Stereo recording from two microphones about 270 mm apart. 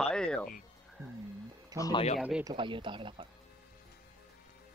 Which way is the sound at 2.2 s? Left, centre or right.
Centre.